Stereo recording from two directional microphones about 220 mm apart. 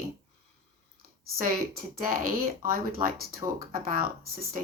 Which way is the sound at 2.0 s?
40° right (ahead or behind).